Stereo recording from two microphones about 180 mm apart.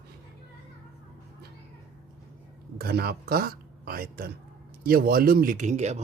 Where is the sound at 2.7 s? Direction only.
60° right (ahead or behind).